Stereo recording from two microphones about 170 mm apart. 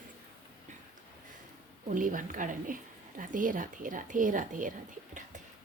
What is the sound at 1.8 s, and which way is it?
A woman's voice, 50° right (ahead or behind).